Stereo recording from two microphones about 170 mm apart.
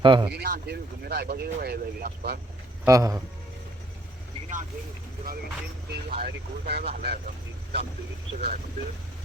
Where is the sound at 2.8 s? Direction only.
20° right (ahead or behind).